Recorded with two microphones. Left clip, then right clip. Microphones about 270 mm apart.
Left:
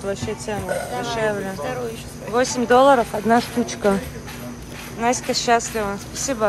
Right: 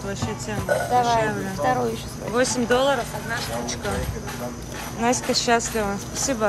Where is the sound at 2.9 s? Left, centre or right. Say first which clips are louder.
Left 9 dB; centre.